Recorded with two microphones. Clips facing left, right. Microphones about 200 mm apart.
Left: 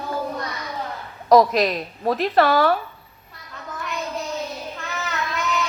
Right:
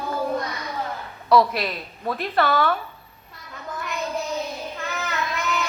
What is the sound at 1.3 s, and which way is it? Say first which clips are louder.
A woman's voice: left 4 dB; 40° left (ahead or behind).